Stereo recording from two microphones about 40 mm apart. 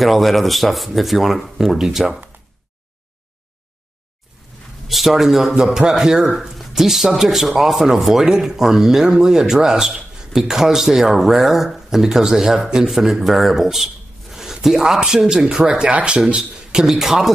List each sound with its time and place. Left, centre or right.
0.0 s speech: centre
4.8 s speech: centre
14.3 s zipper: centre
15.0 s speech: centre